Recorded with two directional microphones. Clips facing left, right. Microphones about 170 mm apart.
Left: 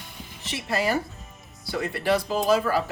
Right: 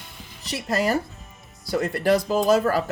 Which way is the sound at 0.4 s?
40° right (ahead or behind).